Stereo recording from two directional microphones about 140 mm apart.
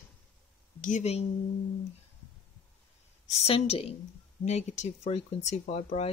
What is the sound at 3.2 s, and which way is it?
Speech, 50° left (ahead or behind).